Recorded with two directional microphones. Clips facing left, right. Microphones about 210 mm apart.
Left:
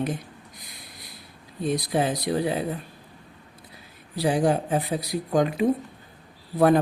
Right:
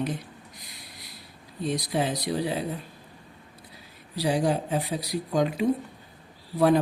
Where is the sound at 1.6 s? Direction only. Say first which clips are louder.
Left 3 dB; 50° left (ahead or behind).